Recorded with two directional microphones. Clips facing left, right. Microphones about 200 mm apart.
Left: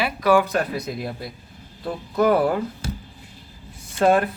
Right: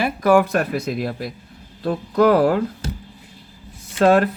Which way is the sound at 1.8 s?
80° right.